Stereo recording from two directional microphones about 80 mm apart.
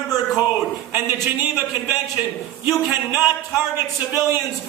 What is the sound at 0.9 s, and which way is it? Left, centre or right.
Speech, right.